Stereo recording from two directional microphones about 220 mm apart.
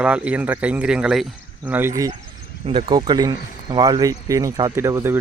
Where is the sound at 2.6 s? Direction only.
25° right (ahead or behind).